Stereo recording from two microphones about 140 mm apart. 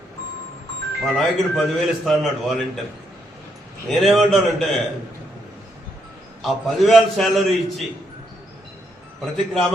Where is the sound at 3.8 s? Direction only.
Centre (ahead or behind).